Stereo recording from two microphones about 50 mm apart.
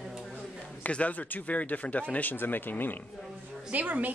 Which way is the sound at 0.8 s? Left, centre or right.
Left.